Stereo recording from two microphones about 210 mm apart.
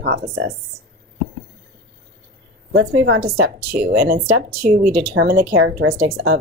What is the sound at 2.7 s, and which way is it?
Speech, 55° right (ahead or behind).